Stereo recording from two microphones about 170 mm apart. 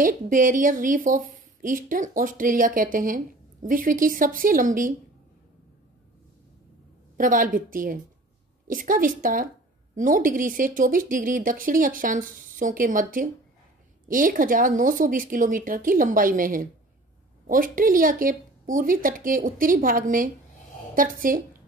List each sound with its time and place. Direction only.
0.0 s speech: 50° right (ahead or behind)
7.2 s speech: 50° right (ahead or behind)